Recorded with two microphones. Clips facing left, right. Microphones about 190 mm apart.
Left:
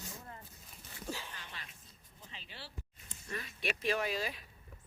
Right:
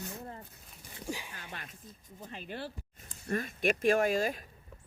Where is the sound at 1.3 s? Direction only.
50° right (ahead or behind).